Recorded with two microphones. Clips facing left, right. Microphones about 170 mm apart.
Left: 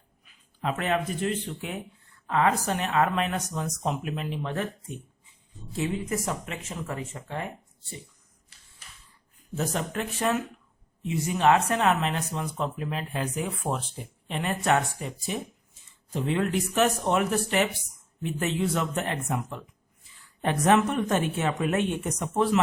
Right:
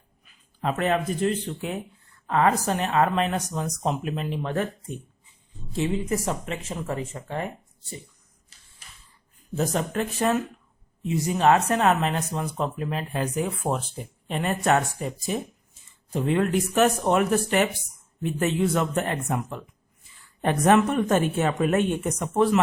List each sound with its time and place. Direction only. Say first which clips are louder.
0.6 s speech: right 3 dB; 40° right (ahead or behind)
5.7 s speech: right 3 dB; 30° right (ahead or behind)
9.6 s a woman's voice: right 4 dB; 35° right (ahead or behind)
16.1 s a woman's voice: right 4 dB; 50° right (ahead or behind)